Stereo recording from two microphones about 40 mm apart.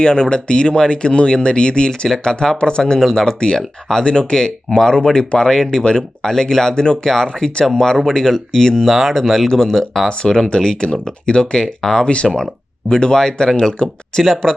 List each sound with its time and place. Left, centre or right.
0.0 s speech: left
3.0 s speech: centre
7.0 s speech: centre
8.9 s speech: centre
9.5 s speech: centre
12.0 s speech: left; by 14.5 s centre